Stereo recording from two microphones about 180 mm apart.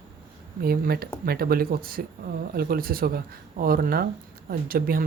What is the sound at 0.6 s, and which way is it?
Speech, 60° right (ahead or behind).